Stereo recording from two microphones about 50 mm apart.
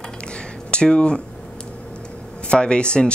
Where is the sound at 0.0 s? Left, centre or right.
Centre.